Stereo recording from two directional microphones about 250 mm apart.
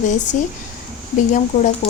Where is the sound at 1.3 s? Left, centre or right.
Left.